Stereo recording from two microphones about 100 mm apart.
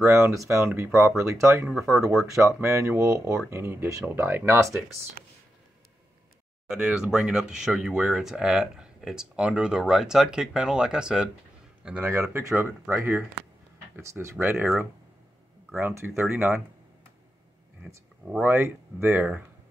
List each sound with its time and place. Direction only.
0.0 s speech: 30° right (ahead or behind)
1.7 s speech: centre (ahead or behind)
2.0 s speech: 30° right (ahead or behind)
6.7 s a man's voice: 5° right (ahead or behind)
12.2 s speech: 30° right (ahead or behind)
17.8 s speech: 5° right (ahead or behind)
18.4 s speech: 25° right (ahead or behind)